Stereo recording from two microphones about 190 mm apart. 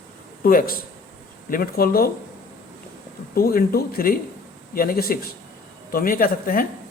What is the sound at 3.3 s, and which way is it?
Speech, 50° left (ahead or behind).